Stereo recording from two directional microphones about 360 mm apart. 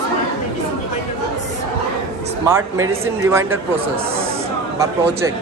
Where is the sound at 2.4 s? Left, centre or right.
Centre.